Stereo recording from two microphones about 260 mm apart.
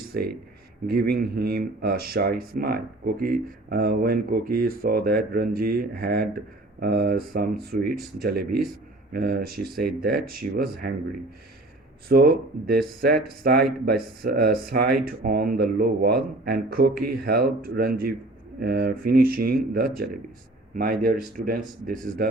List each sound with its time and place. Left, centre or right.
0.9 s speech: right
12.0 s speech: right